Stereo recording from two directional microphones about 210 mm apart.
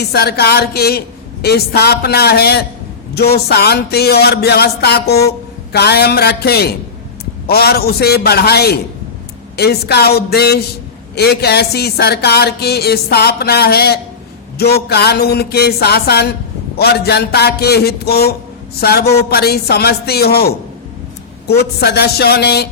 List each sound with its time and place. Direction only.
0.0 s speech: 50° left (ahead or behind)